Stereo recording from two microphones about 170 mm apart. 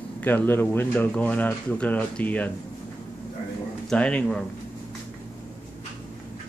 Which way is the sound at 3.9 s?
5° left (ahead or behind).